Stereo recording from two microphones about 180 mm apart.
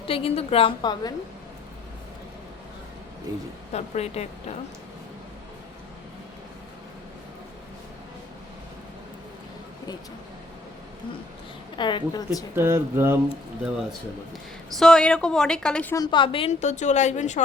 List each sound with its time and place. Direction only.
0.0 s a woman's voice: 30° left (ahead or behind)
3.3 s speech: 20° right (ahead or behind)
3.7 s a woman's voice: 35° left (ahead or behind)
11.8 s a woman's voice: 25° left (ahead or behind)
12.5 s speech: 15° right (ahead or behind)
14.8 s a woman's voice: 5° left (ahead or behind)
16.0 s a woman's voice: 25° left (ahead or behind); by 17.4 s 40° left (ahead or behind)